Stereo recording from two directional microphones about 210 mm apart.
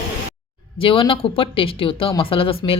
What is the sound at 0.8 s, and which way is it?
Speech, 25° left (ahead or behind).